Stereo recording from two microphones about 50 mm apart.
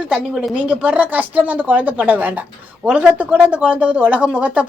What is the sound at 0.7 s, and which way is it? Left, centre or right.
A woman's voice, right.